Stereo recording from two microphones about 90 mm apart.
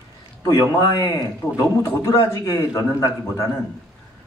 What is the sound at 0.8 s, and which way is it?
A man's voice, 35° left (ahead or behind).